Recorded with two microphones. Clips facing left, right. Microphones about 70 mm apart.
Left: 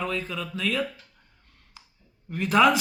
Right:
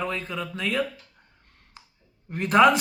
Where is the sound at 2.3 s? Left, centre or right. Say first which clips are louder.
Right 2 dB; right.